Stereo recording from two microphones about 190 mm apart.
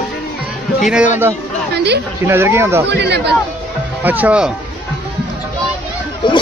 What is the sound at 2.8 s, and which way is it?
Speech, 65° right (ahead or behind).